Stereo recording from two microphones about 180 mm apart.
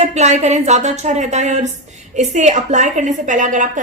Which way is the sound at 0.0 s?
40° right (ahead or behind).